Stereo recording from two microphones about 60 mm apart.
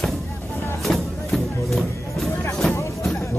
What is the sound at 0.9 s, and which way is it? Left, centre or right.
Music, centre.